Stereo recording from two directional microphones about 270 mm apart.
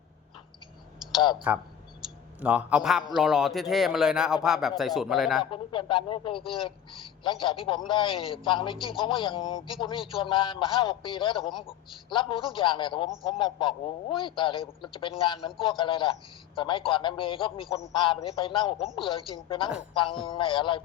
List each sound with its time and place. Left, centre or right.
1.5 s a man's voice: centre
5.5 s a man's voice: centre
12.5 s a man's voice: centre